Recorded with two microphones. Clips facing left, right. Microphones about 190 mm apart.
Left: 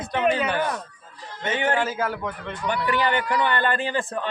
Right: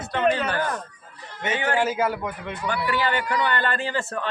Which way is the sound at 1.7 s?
10° right (ahead or behind).